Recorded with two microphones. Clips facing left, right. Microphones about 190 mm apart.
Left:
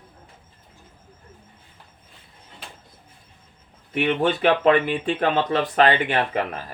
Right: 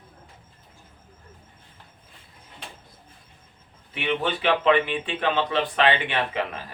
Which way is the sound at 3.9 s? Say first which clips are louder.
Left 5 dB; 50° left (ahead or behind).